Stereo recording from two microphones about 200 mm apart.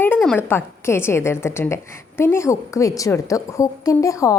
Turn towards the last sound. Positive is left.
turn(degrees=15)  # may be behind; listen again after turning